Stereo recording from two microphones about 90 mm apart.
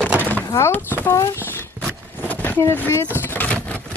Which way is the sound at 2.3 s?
20° left (ahead or behind).